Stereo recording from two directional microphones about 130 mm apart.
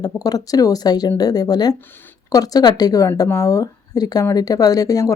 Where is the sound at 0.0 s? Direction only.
30° left (ahead or behind).